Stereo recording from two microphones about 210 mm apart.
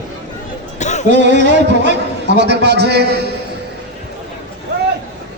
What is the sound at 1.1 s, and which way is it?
A man's voice, 55° right (ahead or behind).